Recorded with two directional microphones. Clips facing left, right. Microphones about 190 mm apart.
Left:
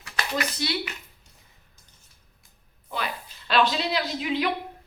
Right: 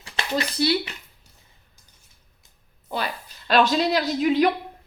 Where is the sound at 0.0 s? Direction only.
30° right (ahead or behind).